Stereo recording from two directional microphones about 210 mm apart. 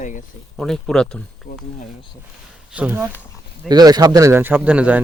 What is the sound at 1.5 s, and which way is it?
Speech, 50° left (ahead or behind).